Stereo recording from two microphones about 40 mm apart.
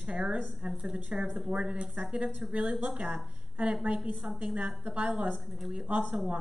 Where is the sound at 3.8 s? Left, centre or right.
Right.